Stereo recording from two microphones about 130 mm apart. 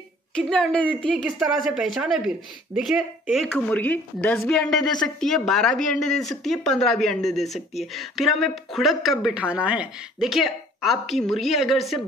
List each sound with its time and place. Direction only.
0.4 s speech: 5° left (ahead or behind)
3.5 s speech: 10° left (ahead or behind)
4.6 s speech: centre (ahead or behind)